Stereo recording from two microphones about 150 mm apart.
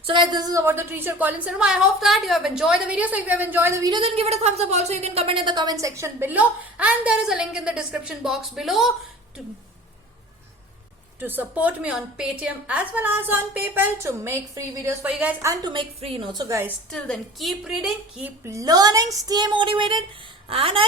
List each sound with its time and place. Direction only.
0.1 s a woman's voice: 30° right (ahead or behind)
3.9 s a woman's voice: 40° right (ahead or behind); by 8.9 s centre (ahead or behind)
11.2 s a woman's voice: 10° right (ahead or behind)
15.7 s a woman's voice: 35° right (ahead or behind)
16.9 s a woman's voice: centre (ahead or behind)
18.4 s a woman's voice: 25° right (ahead or behind)